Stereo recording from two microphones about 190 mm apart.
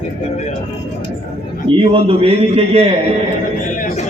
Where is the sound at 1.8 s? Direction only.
30° right (ahead or behind).